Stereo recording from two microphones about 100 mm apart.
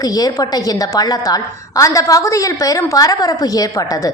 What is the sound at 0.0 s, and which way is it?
A woman's voice, 40° left (ahead or behind).